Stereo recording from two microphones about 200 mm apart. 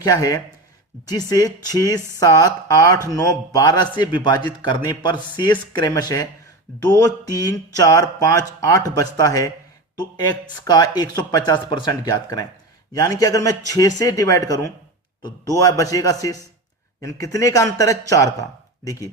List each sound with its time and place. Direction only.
0.0 s a man's voice: 20° left (ahead or behind)